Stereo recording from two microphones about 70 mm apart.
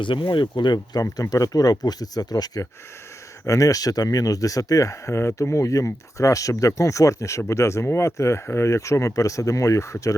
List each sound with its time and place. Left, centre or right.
0.6 s speech: left
1.0 s speech: left
3.4 s speech: left